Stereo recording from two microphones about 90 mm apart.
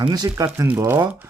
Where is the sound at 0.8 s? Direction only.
30° right (ahead or behind).